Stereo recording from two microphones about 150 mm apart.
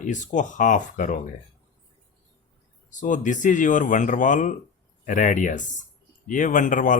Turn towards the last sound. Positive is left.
turn(degrees=60)  # may be behind; listen again after turning